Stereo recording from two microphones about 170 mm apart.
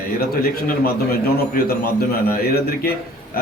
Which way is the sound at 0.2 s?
60° left (ahead or behind).